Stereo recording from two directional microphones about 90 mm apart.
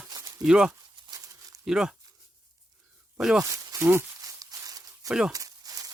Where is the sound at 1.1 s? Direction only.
40° right (ahead or behind).